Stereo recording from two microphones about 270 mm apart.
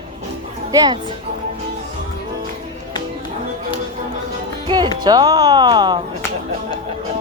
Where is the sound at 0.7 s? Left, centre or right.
Centre.